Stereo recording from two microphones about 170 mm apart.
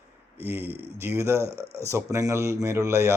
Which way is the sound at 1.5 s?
70° right (ahead or behind).